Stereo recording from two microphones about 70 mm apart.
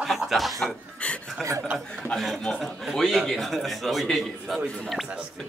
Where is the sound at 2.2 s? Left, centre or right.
Centre.